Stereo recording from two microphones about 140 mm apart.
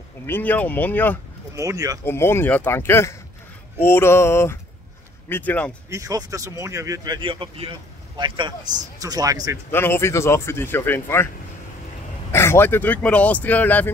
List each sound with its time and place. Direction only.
0.3 s speech: 10° left (ahead or behind)
1.5 s speech: 20° right (ahead or behind)
2.0 s speech: 15° left (ahead or behind)
5.9 s speech: 25° right (ahead or behind)
7.2 s speech: 40° right (ahead or behind)
9.7 s speech: 15° left (ahead or behind)
12.3 s speech: 15° left (ahead or behind)